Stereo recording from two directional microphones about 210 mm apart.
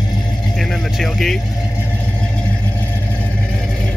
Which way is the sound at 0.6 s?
Centre (ahead or behind).